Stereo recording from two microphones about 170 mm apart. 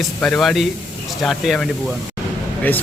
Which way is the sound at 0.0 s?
5° left (ahead or behind).